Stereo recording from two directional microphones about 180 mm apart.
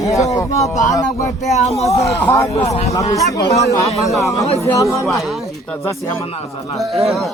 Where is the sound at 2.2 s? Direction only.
15° left (ahead or behind).